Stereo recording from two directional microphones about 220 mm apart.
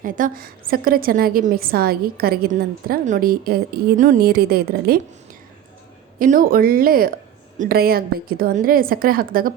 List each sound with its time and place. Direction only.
0.0 s a woman's voice: 40° right (ahead or behind)
6.1 s a woman's voice: 40° right (ahead or behind)